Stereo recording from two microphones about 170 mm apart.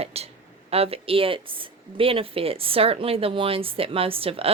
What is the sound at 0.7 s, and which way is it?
Speech, 35° right (ahead or behind).